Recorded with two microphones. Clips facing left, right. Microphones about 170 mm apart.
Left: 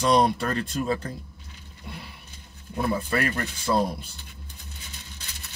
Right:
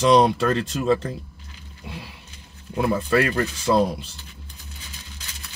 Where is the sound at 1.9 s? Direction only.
90° right.